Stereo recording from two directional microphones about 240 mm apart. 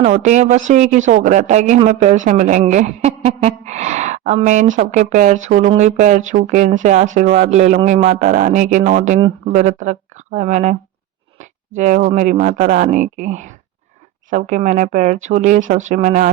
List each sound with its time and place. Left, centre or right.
0.0 s speech: right
11.8 s speech: right